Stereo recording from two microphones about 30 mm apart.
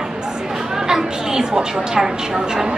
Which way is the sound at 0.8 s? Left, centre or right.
Right.